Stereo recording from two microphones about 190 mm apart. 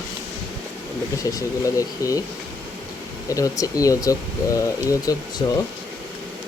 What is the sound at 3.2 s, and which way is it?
Speech, 15° left (ahead or behind).